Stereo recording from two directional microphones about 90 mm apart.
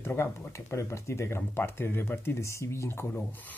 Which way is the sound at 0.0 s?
25° left (ahead or behind).